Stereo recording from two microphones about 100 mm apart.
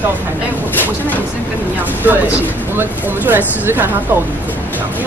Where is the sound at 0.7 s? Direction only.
20° left (ahead or behind).